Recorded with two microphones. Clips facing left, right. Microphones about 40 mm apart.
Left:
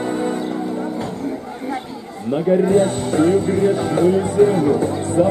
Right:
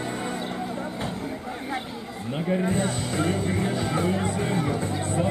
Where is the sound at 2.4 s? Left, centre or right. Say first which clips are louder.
Left 9 dB; centre.